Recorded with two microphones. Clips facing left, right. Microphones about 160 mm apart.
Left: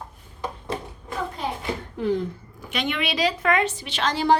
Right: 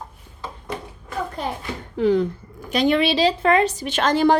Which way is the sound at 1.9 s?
90° right.